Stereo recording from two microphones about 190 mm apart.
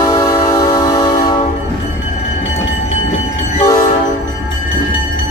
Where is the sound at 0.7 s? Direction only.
20° left (ahead or behind).